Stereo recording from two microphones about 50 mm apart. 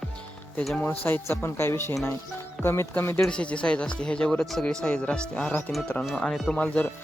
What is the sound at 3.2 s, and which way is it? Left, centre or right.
Speech, left.